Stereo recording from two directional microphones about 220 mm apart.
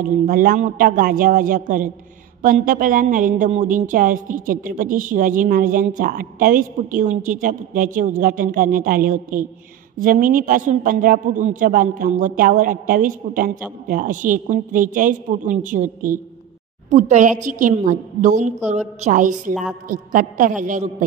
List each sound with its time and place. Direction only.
0.0 s a woman's voice: 40° right (ahead or behind)